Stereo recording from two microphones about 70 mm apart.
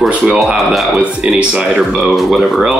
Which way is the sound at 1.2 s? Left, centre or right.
Centre.